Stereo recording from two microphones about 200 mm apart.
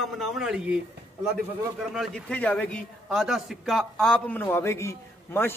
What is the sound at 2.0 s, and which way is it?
A man's voice, 5° left (ahead or behind).